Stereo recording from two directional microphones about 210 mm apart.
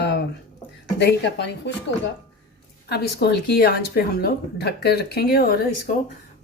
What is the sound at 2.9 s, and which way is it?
Speech, 50° left (ahead or behind).